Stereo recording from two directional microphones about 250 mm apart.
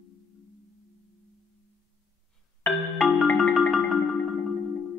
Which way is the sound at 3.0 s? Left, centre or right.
Centre.